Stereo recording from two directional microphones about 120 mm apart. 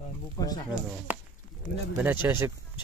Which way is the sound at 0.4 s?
35° left (ahead or behind).